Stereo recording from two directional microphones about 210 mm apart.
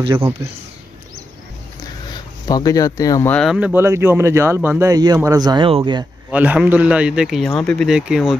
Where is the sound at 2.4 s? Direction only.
15° left (ahead or behind); by 6.1 s 20° right (ahead or behind).